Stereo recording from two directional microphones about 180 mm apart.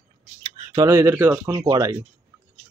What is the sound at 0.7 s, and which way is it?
Speech, 15° right (ahead or behind).